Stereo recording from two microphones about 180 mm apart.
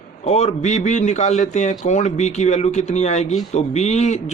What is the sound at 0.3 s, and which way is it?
Speech, 40° left (ahead or behind).